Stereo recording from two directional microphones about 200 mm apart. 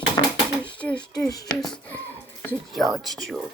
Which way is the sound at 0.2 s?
20° left (ahead or behind).